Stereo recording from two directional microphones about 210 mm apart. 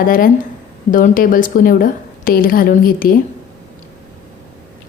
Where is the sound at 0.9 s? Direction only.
40° left (ahead or behind).